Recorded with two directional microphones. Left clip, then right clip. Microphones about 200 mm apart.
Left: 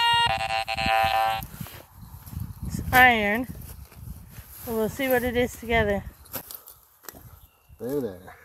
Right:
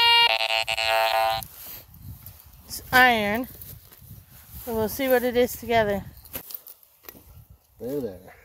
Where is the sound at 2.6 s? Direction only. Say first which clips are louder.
Left 1 dB; 20° right (ahead or behind).